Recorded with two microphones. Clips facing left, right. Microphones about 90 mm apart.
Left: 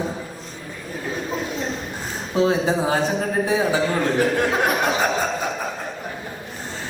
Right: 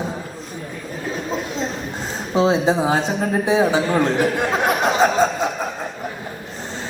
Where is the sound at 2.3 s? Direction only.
20° right (ahead or behind).